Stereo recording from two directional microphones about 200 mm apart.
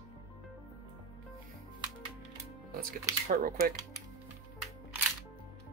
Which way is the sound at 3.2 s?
45° right (ahead or behind).